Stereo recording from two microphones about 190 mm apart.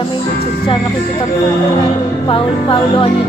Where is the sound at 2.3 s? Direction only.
30° left (ahead or behind).